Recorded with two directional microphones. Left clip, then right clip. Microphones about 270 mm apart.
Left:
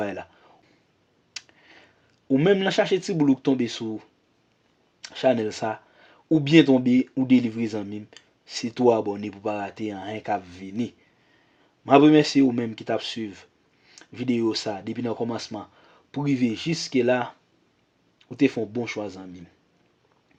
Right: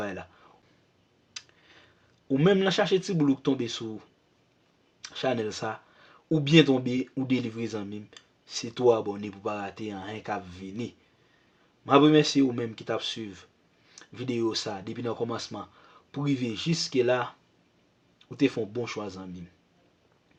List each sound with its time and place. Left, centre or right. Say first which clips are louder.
0.0 s a sound: left 5 dB; left
1.3 s speech: left 4 dB; left
11.9 s speech: left 4 dB; left